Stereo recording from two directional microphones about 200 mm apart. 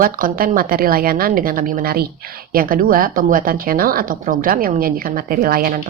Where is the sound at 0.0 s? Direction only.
45° right (ahead or behind).